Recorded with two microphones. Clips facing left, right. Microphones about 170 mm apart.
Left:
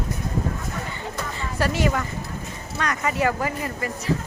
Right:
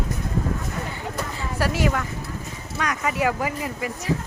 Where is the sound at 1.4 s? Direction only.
5° right (ahead or behind).